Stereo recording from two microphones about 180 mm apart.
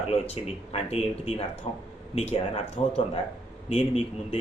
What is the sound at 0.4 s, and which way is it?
Speech, 30° left (ahead or behind).